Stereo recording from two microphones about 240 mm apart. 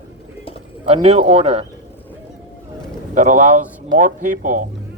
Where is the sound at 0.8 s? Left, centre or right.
Right.